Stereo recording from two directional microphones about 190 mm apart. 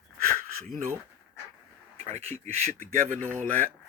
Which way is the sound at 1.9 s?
35° right (ahead or behind).